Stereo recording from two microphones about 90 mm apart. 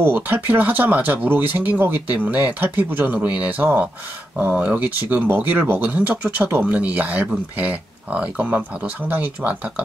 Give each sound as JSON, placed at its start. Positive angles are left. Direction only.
{"t": 0.0, "sound": "speech", "side_deg": -20}